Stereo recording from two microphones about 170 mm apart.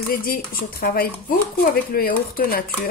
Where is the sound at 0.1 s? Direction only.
60° left (ahead or behind).